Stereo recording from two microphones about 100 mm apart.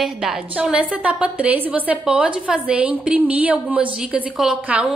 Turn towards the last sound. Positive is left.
turn(degrees=-10)  # may be behind; listen again after turning